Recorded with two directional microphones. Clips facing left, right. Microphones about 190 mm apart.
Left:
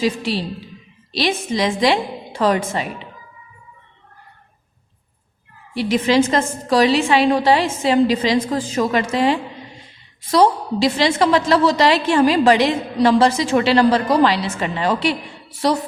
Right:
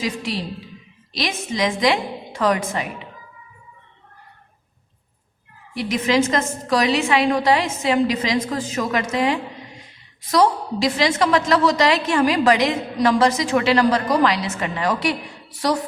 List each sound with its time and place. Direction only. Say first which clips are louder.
0.0 s a woman's voice: left 5 dB; 30° left (ahead or behind)
5.7 s a woman's voice: left 3 dB; 30° left (ahead or behind)